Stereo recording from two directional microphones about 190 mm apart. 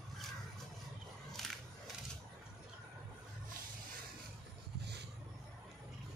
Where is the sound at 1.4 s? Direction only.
Centre (ahead or behind).